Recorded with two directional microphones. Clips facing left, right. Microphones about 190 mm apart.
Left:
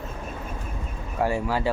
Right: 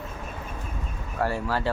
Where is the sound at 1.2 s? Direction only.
15° left (ahead or behind).